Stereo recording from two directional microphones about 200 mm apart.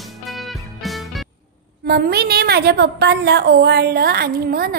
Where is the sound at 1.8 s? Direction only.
50° right (ahead or behind).